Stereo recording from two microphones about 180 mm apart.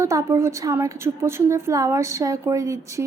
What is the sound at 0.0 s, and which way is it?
A woman's voice, 15° right (ahead or behind).